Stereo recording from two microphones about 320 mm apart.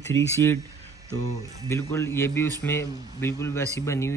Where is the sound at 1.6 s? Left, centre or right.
Centre.